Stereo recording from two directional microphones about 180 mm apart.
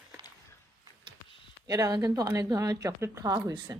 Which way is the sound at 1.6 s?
20° right (ahead or behind).